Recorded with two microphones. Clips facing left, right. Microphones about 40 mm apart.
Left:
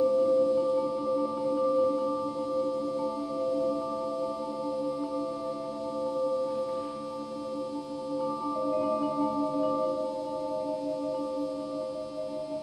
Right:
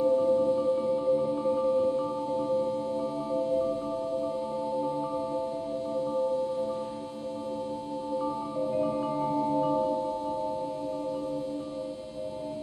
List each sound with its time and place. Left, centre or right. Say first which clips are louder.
0.0 s music: even; right
3.0 s music: right 1 dB; right
9.0 s music: even; right